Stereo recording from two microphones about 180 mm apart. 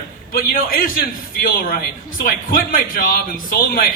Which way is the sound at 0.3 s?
50° left (ahead or behind).